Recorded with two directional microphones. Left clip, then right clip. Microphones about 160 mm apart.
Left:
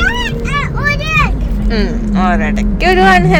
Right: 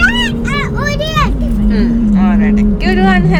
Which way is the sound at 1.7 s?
15° left (ahead or behind).